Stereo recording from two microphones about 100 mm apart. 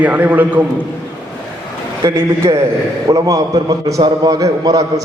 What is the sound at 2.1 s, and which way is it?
A man's voice, 25° right (ahead or behind).